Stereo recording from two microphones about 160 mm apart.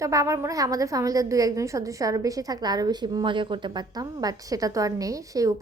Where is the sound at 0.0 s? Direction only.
20° right (ahead or behind).